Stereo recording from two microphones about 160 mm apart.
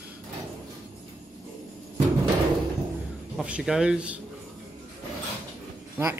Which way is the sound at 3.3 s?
5° right (ahead or behind).